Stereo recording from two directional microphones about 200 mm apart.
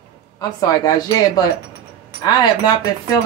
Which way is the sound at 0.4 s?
20° left (ahead or behind).